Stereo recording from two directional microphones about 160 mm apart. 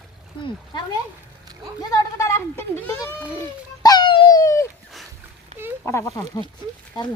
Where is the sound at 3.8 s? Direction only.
25° left (ahead or behind).